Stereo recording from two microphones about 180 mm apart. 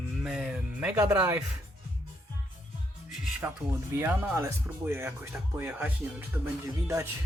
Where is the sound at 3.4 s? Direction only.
15° right (ahead or behind).